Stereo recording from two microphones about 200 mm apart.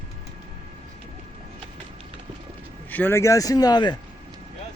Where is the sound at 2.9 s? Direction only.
10° left (ahead or behind).